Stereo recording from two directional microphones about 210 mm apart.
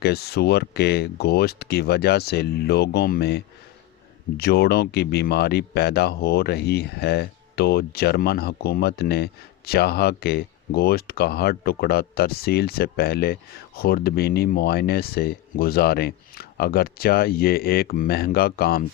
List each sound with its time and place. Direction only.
0.0 s speech: 50° left (ahead or behind)